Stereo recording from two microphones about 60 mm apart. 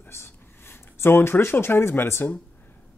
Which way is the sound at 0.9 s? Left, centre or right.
Left.